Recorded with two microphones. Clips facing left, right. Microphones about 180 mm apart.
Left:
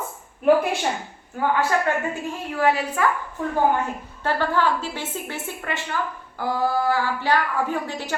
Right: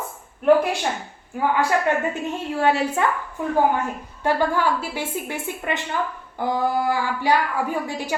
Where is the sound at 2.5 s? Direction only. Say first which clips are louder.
Right 1 dB; 30° right (ahead or behind).